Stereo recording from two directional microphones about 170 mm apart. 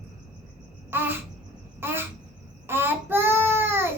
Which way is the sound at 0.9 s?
10° right (ahead or behind).